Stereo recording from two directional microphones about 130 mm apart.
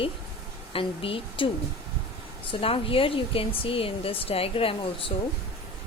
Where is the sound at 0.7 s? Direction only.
45° left (ahead or behind).